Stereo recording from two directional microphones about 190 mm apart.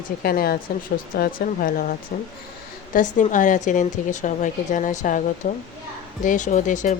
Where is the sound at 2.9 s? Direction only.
40° left (ahead or behind).